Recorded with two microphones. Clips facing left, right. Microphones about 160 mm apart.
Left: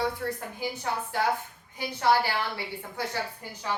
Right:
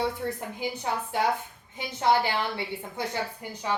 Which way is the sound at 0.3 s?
20° right (ahead or behind).